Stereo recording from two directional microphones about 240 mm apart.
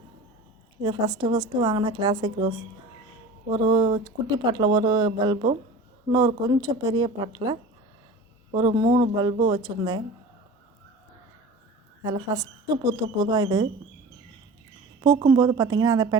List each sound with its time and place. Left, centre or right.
0.8 s speech: centre
3.5 s speech: centre
8.5 s speech: right
12.0 s speech: centre
15.3 s speech: centre